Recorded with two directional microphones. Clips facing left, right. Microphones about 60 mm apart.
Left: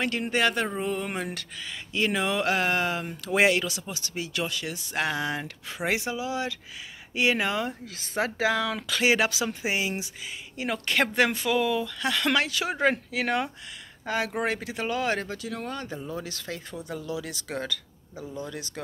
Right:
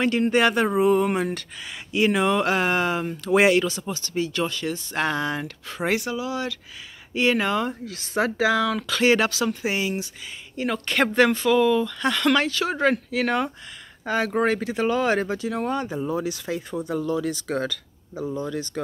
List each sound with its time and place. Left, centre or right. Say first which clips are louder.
0.0 s speech: right 6 dB; centre
5.9 s speech: right 3 dB; centre
15.2 s speech: right 8 dB; right; by 16.6 s centre
16.8 s speech: right 9 dB; centre